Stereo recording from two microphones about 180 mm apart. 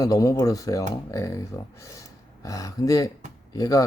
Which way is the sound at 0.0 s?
20° left (ahead or behind).